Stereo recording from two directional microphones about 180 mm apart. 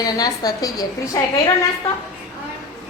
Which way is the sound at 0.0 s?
20° left (ahead or behind).